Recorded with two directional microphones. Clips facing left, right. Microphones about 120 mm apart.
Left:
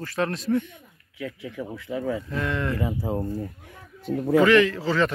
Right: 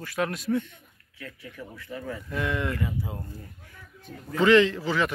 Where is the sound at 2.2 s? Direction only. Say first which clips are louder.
Left 1 dB; 10° right (ahead or behind).